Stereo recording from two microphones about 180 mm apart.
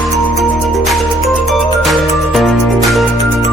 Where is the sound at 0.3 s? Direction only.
Centre (ahead or behind).